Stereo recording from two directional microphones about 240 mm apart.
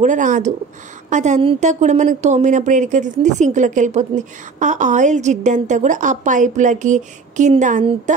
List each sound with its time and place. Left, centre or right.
0.0 s a woman's voice: right